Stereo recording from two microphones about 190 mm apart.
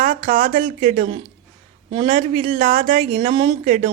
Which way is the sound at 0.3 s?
45° right (ahead or behind).